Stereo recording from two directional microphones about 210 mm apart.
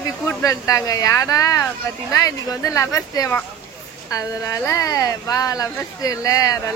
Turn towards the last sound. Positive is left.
turn(degrees=15)  # may be behind; listen again after turning